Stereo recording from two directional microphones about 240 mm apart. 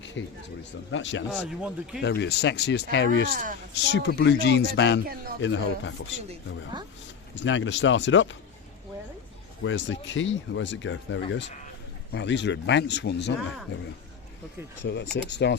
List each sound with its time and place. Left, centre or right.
0.0 s a sound: left
0.9 s speech: left
1.3 s speech: centre
2.0 s speech: left
3.2 s speech: right
3.9 s speech: left
5.0 s speech: right
5.4 s speech: left
7.3 s speech: left
9.6 s speech: left
15.1 s speech: left